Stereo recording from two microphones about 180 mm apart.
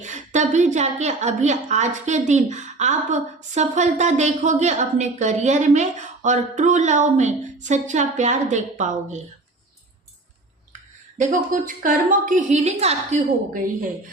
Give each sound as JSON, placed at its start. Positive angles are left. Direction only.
{"t": 0.0, "sound": "a woman's voice", "side_deg": -40}
{"t": 11.2, "sound": "a woman's voice", "side_deg": -45}